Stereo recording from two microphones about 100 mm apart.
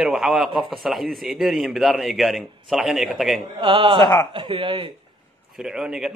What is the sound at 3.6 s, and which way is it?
Speech, 50° right (ahead or behind).